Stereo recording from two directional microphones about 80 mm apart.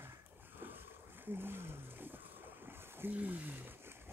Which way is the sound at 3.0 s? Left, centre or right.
Right.